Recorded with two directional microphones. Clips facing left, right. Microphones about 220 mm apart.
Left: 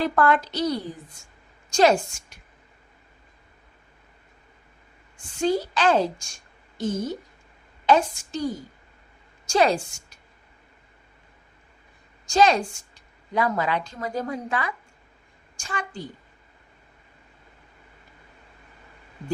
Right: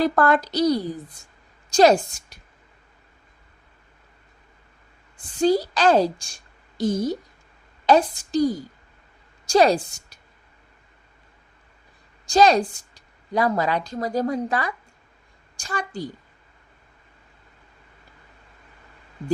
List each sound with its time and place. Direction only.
0.0 s a woman's voice: 40° right (ahead or behind)
5.1 s a woman's voice: 35° right (ahead or behind)
12.2 s a woman's voice: 35° right (ahead or behind)